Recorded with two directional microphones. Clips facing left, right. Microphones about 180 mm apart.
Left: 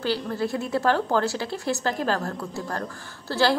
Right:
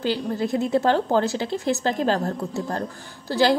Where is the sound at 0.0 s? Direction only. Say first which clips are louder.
Right 2 dB; 20° right (ahead or behind).